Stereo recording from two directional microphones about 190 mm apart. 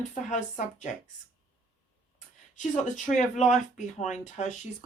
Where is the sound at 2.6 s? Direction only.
40° left (ahead or behind).